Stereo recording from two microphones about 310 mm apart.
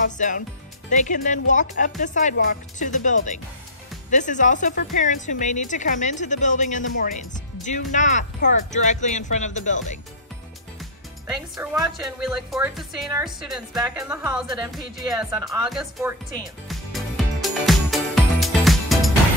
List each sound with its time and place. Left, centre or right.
0.0 s speech: left
10.8 s music: centre
12.0 s speech: centre
16.6 s music: centre